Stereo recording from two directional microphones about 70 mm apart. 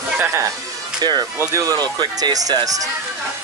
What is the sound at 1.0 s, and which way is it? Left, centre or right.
Speech, right.